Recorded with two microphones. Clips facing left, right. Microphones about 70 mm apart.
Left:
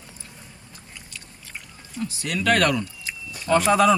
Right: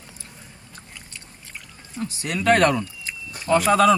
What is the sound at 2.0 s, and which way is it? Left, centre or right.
Speech, right.